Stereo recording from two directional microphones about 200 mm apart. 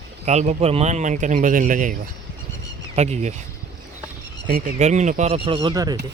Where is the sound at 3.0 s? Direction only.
35° right (ahead or behind).